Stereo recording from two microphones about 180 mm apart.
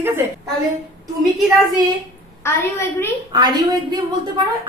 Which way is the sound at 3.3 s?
20° right (ahead or behind).